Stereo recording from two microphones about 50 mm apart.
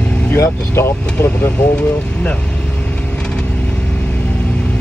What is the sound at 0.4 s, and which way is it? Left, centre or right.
Speech, left.